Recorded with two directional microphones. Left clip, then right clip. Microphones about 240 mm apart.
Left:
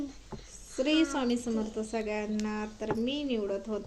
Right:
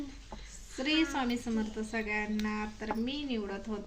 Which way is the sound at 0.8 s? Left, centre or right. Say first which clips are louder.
Left 3 dB; centre.